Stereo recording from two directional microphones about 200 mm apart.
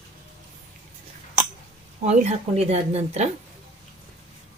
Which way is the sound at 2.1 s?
30° right (ahead or behind).